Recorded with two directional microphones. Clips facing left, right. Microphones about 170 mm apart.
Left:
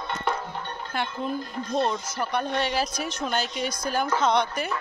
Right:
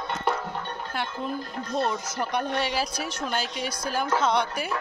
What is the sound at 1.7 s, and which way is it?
Speech, 5° right (ahead or behind).